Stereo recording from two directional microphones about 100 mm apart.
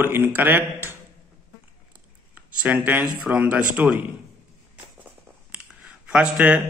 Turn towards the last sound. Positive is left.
turn(degrees=-10)  # may be behind; listen again after turning